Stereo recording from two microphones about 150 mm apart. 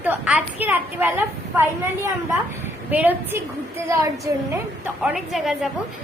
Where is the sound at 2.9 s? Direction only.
10° right (ahead or behind).